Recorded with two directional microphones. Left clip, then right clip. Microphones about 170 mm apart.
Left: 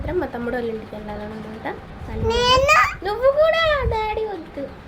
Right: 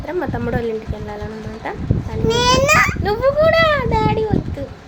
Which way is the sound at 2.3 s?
5° right (ahead or behind).